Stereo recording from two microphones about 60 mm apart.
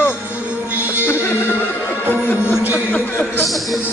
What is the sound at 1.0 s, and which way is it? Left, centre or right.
Music, left.